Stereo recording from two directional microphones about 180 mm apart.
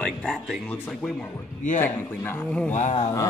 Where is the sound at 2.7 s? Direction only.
40° left (ahead or behind).